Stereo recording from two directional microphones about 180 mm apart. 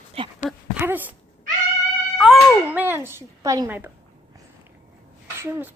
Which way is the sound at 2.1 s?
5° right (ahead or behind).